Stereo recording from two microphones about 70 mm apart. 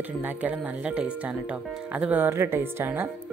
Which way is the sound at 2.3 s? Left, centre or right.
Right.